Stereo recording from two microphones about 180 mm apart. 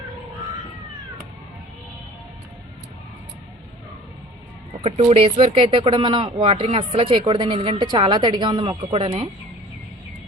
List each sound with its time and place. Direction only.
4.8 s speech: 35° right (ahead or behind)